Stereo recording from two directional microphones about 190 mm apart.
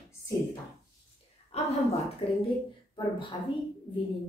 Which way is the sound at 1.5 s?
35° left (ahead or behind).